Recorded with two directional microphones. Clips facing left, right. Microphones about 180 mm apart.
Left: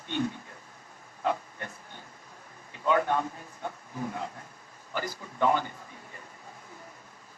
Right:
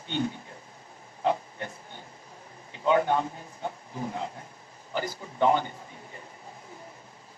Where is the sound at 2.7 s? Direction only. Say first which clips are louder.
Right 3 dB; 25° right (ahead or behind).